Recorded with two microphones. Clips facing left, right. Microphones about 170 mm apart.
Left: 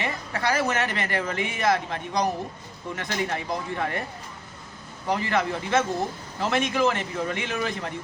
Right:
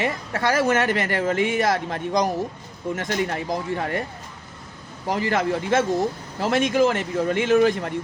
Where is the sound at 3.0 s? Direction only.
45° right (ahead or behind).